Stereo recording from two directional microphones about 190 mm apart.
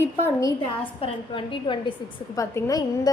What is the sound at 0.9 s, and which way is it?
Speech, 30° left (ahead or behind).